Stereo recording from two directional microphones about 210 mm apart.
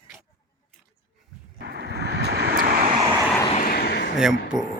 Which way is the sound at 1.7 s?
50° right (ahead or behind).